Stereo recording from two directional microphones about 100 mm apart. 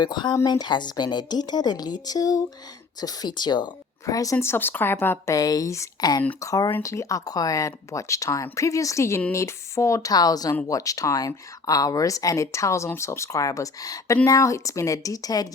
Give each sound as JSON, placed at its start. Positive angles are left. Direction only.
{"t": 0.0, "sound": "a woman's voice", "side_deg": 50}
{"t": 4.0, "sound": "a woman's voice", "side_deg": 35}
{"t": 5.3, "sound": "speech", "side_deg": 40}